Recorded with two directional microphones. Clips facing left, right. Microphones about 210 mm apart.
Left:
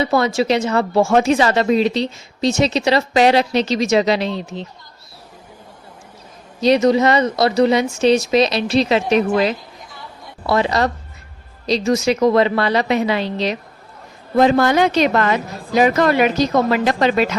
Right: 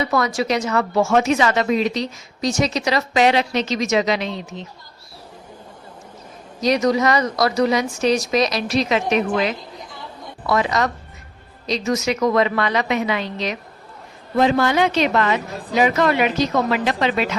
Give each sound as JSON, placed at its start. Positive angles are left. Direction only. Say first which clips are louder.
{"t": 0.0, "sound": "speech", "louder": "left 4 dB", "side_deg": 30}
{"t": 6.6, "sound": "speech", "louder": "left 4 dB", "side_deg": 25}
{"t": 14.3, "sound": "speech", "louder": "left 3 dB", "side_deg": 45}